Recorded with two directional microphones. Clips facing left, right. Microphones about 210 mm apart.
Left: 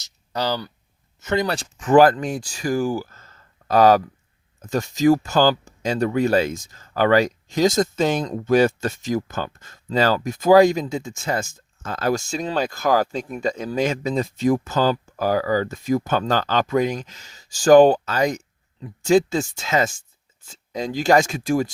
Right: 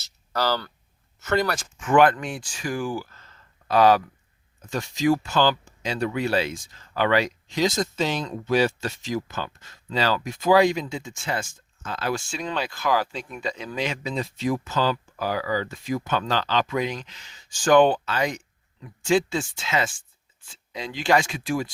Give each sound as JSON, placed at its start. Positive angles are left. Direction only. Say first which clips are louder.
{"t": 0.0, "sound": "a sound", "louder": "left 1 dB", "side_deg": 15}
{"t": 1.2, "sound": "speech", "louder": "left 1 dB", "side_deg": 15}
{"t": 1.5, "sound": "speech", "louder": "left 4 dB", "side_deg": 35}